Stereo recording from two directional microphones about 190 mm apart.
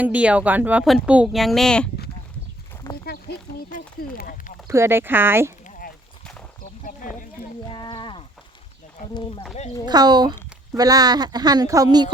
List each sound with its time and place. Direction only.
0.0 s speech: 5° right (ahead or behind)
3.1 s speech: 50° left (ahead or behind)
4.7 s speech: 15° right (ahead or behind)
6.6 s a sound: 45° left (ahead or behind)
7.7 s a sound: 25° left (ahead or behind)
9.8 s speech: 20° right (ahead or behind)